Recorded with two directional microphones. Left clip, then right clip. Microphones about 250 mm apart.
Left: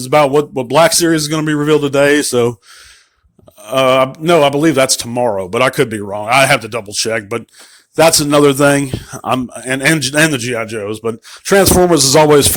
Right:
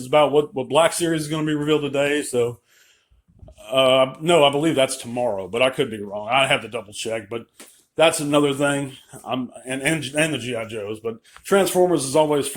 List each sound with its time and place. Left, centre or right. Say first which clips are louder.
0.1 s a man's voice: left 6 dB; left
3.6 s a man's voice: left 5 dB; left